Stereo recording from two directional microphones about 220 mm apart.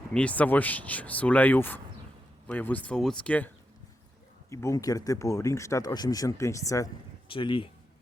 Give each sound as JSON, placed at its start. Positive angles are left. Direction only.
{"t": 0.1, "sound": "speech", "side_deg": 5}